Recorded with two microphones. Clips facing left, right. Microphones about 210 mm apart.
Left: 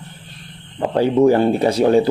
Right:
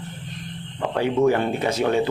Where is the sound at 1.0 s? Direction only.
35° left (ahead or behind).